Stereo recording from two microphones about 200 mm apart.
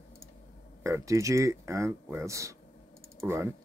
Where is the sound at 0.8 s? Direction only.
15° right (ahead or behind).